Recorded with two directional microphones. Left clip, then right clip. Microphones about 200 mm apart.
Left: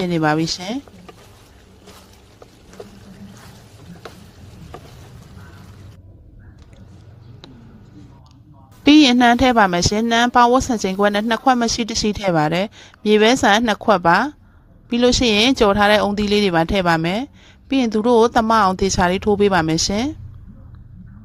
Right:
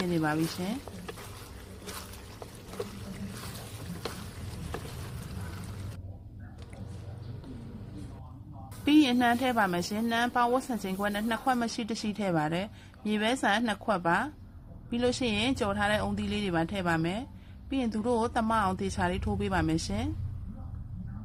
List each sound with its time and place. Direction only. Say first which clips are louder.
0.1 s a woman's voice: left 13 dB; 45° left (ahead or behind)
8.8 s a woman's voice: left 12 dB; 45° left (ahead or behind)